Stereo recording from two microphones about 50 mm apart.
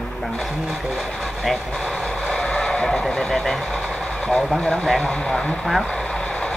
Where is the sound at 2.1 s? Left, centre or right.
Left.